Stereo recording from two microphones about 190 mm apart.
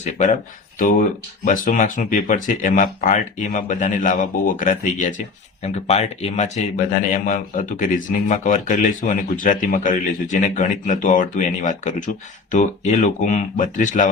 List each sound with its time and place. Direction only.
0.0 s speech: 40° left (ahead or behind)